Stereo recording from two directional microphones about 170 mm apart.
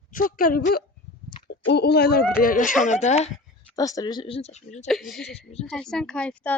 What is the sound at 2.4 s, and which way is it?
Speech, 50° left (ahead or behind).